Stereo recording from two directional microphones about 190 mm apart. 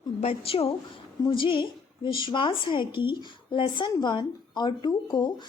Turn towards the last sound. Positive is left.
turn(degrees=20)  # may be behind; listen again after turning